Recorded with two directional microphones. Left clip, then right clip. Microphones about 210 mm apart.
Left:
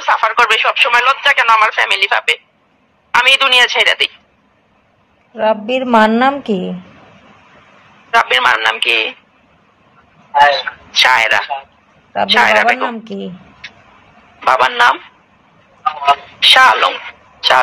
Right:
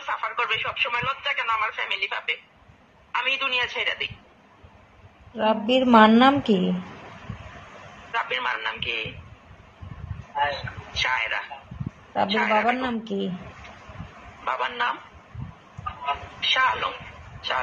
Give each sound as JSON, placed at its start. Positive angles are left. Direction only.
{"t": 0.0, "sound": "a man's voice", "side_deg": 45}
{"t": 5.3, "sound": "a woman's voice", "side_deg": 30}
{"t": 8.1, "sound": "speech", "side_deg": 40}
{"t": 10.3, "sound": "a man's voice", "side_deg": 45}
{"t": 12.8, "sound": "a woman's voice", "side_deg": 25}
{"t": 14.4, "sound": "speech", "side_deg": 45}